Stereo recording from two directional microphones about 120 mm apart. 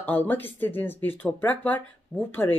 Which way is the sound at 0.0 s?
15° left (ahead or behind).